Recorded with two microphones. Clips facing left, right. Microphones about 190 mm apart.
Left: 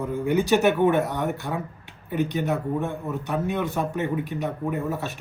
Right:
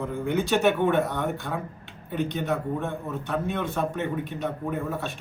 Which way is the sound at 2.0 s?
5° left (ahead or behind).